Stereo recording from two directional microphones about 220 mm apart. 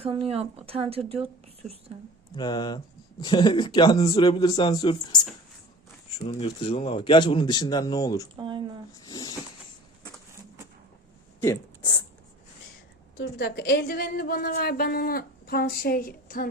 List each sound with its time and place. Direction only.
0.0 s a woman's voice: 25° right (ahead or behind)
2.3 s speech: 20° left (ahead or behind)
6.1 s speech: 25° left (ahead or behind)
8.4 s a woman's voice: 20° right (ahead or behind)
9.0 s speech: 20° left (ahead or behind)
11.4 s speech: 20° left (ahead or behind)
13.1 s a woman's voice: 50° left (ahead or behind)